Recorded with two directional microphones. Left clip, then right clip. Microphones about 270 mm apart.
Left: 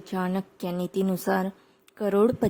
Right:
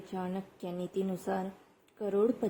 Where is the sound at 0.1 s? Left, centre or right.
Left.